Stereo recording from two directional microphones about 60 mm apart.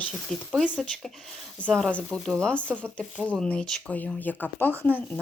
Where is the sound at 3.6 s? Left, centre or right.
Centre.